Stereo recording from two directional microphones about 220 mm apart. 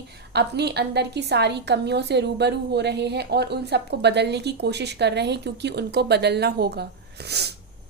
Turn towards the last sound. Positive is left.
turn(degrees=-50)  # may be behind; listen again after turning